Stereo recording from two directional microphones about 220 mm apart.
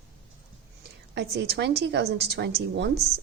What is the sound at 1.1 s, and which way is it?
A woman's voice, 50° right (ahead or behind).